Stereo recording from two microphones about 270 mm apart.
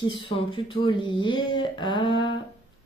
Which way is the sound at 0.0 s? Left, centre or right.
Centre.